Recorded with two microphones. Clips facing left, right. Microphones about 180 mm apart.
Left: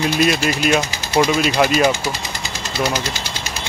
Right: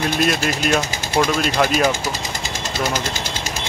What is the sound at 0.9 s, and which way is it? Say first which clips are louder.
Sewing machine: left 2 dB; 50° right (ahead or behind).